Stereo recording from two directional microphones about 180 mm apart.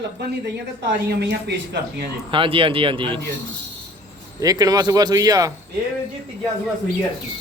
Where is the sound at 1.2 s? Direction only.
70° right (ahead or behind).